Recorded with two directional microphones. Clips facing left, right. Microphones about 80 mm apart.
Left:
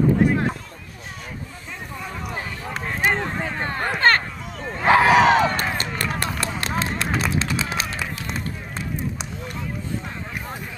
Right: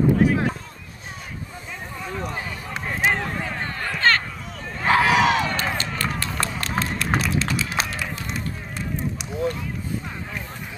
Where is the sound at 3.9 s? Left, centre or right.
Left.